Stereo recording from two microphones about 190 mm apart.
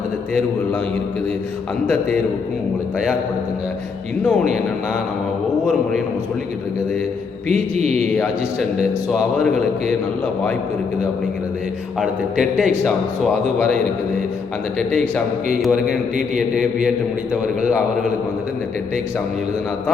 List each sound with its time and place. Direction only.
4.2 s a man's voice: centre (ahead or behind)
7.4 s mantra: 35° right (ahead or behind)
11.9 s a man's voice: centre (ahead or behind)
14.8 s a man's voice: 5° left (ahead or behind)